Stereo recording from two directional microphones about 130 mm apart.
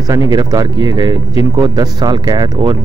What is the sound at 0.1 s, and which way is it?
Speech, 30° right (ahead or behind).